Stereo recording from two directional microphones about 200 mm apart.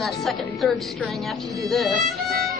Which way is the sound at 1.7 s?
Centre (ahead or behind).